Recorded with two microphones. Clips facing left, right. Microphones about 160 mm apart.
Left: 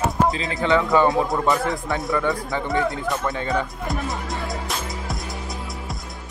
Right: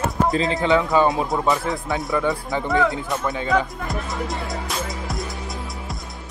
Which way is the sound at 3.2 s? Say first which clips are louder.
Even; 10° right (ahead or behind).